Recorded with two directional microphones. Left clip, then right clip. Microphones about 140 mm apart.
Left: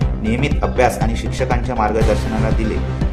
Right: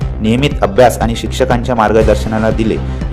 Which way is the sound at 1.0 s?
55° right (ahead or behind).